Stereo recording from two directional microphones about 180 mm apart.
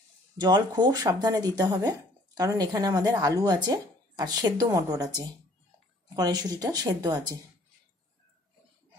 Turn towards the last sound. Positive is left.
turn(degrees=-25)  # may be behind; listen again after turning